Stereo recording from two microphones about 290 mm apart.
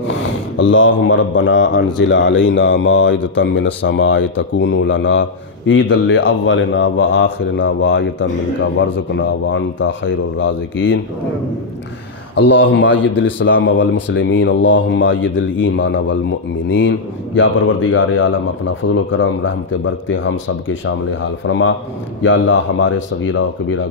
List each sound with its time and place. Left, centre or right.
0.1 s speech: left
12.5 s speech: left